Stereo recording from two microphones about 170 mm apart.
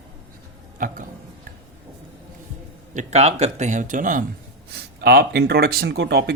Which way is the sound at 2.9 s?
45° right (ahead or behind).